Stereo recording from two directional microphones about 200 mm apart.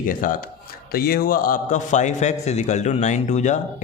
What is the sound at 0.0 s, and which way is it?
A man's voice, 45° left (ahead or behind).